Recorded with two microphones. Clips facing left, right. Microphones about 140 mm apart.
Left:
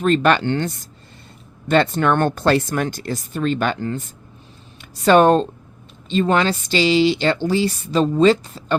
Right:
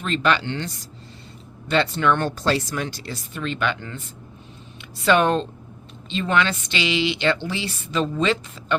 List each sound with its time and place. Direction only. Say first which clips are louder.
0.0 s speech: left 6 dB; 45° left (ahead or behind)